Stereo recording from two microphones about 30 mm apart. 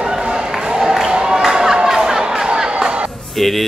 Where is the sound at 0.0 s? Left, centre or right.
Right.